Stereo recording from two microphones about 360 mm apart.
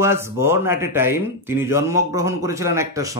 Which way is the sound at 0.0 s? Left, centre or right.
Centre.